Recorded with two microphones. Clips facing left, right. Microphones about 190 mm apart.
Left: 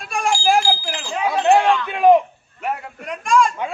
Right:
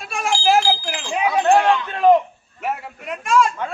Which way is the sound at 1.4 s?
15° left (ahead or behind).